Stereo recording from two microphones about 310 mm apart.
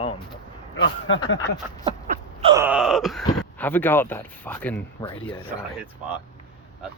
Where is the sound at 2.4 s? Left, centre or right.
Centre.